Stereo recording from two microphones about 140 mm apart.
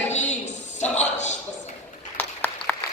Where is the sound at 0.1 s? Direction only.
55° left (ahead or behind).